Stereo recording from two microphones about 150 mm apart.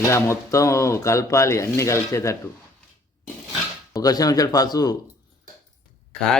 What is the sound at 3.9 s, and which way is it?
A man's voice, 25° left (ahead or behind).